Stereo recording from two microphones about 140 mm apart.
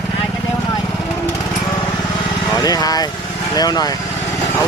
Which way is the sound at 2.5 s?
25° left (ahead or behind).